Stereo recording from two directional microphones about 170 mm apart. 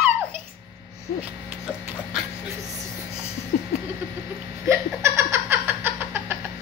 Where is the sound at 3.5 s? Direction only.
50° left (ahead or behind).